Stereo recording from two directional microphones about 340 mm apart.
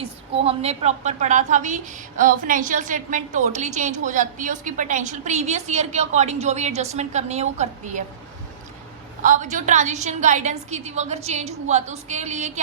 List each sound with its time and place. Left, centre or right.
0.0 s a woman's voice: centre
9.2 s a woman's voice: right